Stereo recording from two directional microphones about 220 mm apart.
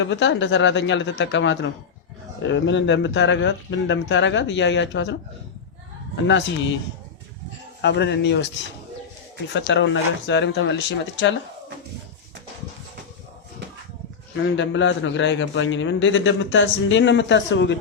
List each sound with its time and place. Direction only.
0.0 s a man's voice: 55° left (ahead or behind)
6.2 s a man's voice: 55° left (ahead or behind)
7.8 s speech: 50° left (ahead or behind)
9.5 s a man's voice: 55° left (ahead or behind)
14.3 s a man's voice: 55° left (ahead or behind)